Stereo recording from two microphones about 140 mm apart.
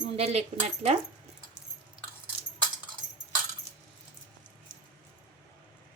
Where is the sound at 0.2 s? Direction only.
50° right (ahead or behind).